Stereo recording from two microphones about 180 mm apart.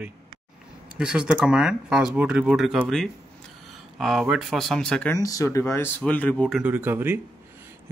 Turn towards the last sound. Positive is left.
turn(degrees=-10)  # may be behind; listen again after turning